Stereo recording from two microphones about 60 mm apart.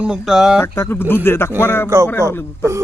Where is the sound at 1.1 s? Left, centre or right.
Left.